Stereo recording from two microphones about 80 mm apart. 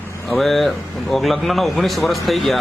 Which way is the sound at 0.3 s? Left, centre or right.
Centre.